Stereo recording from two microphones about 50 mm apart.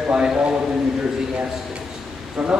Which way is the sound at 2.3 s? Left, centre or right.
Right.